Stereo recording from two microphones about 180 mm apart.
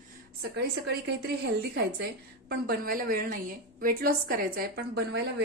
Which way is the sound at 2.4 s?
55° right (ahead or behind).